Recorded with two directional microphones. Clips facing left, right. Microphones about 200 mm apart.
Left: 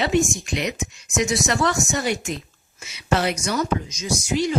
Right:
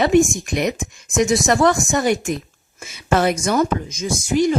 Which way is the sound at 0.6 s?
50° right (ahead or behind).